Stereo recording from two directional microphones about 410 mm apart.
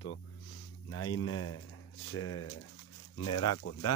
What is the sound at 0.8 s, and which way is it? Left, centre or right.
Speech, left.